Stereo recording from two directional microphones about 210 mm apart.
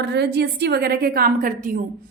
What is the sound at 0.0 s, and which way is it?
Speech, 55° right (ahead or behind).